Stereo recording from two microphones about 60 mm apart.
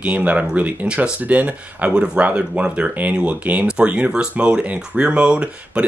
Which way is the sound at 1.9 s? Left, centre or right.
Centre.